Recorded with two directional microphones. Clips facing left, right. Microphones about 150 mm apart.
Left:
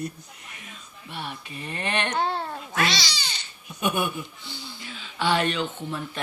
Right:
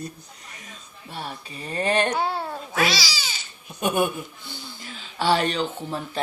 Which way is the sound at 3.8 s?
45° right (ahead or behind).